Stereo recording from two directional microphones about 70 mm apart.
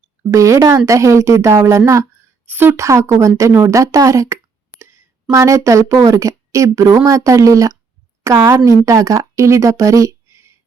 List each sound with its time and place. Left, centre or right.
0.3 s speech: right
2.5 s speech: right
2.7 s speech: right
4.8 s a sound: right
5.3 s speech: right